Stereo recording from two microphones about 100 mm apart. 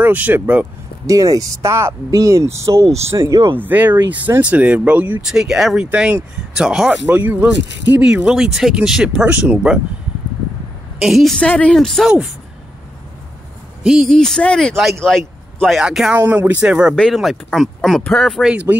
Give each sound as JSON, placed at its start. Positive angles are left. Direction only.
{"t": 0.0, "sound": "speech", "side_deg": -20}
{"t": 1.0, "sound": "speech", "side_deg": -35}
{"t": 3.5, "sound": "speech", "side_deg": -20}
{"t": 5.3, "sound": "speech", "side_deg": -5}
{"t": 5.9, "sound": "speech", "side_deg": -15}
{"t": 7.1, "sound": "speech", "side_deg": -20}
{"t": 11.0, "sound": "speech", "side_deg": 0}
{"t": 13.8, "sound": "speech", "side_deg": 0}
{"t": 15.8, "sound": "speech", "side_deg": -5}
{"t": 16.2, "sound": "speech", "side_deg": -15}
{"t": 16.9, "sound": "speech", "side_deg": 5}
{"t": 18.5, "sound": "speech", "side_deg": -15}